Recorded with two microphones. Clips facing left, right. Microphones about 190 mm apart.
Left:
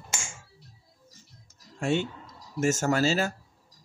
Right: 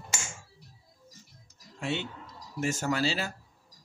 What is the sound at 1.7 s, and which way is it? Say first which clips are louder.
Speech: left 6 dB; 45° left (ahead or behind).